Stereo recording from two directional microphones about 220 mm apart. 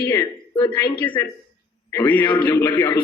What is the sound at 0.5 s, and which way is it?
Speech, 20° left (ahead or behind).